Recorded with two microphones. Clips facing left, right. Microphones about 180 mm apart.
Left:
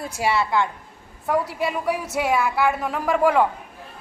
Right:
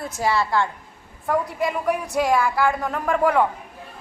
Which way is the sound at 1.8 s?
5° left (ahead or behind).